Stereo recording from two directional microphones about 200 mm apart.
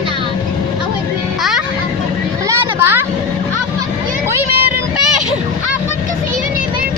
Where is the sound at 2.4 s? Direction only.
10° right (ahead or behind).